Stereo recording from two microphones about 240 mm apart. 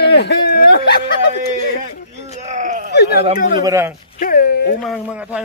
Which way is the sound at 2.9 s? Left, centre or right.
Left.